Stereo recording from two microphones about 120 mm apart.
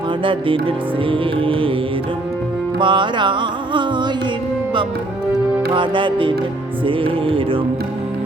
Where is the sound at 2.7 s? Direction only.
40° right (ahead or behind).